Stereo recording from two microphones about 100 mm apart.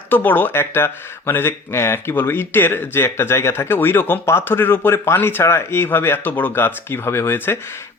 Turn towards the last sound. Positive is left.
turn(degrees=20)  # may be behind; listen again after turning